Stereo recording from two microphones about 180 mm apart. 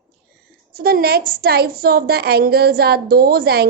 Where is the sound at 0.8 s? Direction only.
55° right (ahead or behind).